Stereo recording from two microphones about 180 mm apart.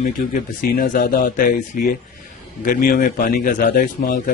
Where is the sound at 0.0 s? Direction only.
50° left (ahead or behind).